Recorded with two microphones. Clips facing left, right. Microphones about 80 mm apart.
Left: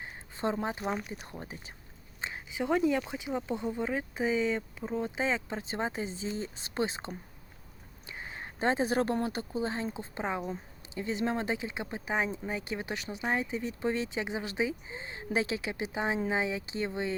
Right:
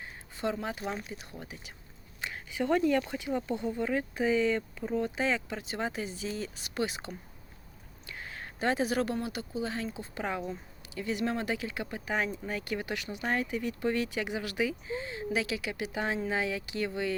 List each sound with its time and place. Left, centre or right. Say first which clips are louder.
0.0 s a sound: left 1 dB; left
1.0 s speech: left 1 dB; left
2.2 s speech: right 1 dB; centre